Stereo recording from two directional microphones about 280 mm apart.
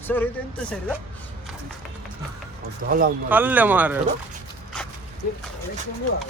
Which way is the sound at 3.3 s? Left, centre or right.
Centre.